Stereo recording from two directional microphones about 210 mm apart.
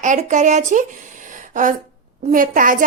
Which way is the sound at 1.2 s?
40° right (ahead or behind).